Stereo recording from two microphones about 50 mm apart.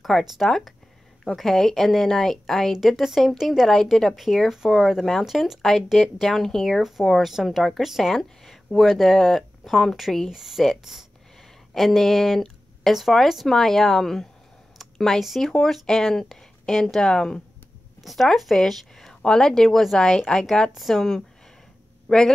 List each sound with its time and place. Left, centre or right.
0.1 s a woman's voice: centre
3.6 s speech: centre
3.9 s a woman's voice: centre
14.8 s a sound: centre
15.2 s a woman's voice: centre
18.0 s speech: centre
20.7 s a woman's voice: centre
22.1 s a man's voice: centre